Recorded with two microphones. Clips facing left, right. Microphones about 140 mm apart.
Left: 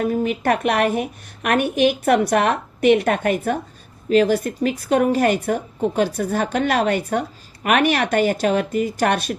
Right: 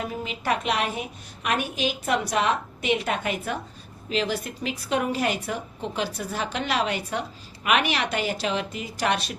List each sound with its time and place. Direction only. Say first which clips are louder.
0.0 s a woman's voice: left 10 dB; 50° left (ahead or behind)